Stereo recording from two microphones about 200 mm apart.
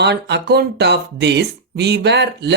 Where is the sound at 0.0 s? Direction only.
60° right (ahead or behind).